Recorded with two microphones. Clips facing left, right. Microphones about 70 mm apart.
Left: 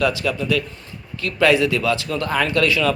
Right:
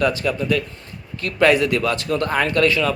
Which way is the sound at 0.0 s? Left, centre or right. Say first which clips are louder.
Even; right.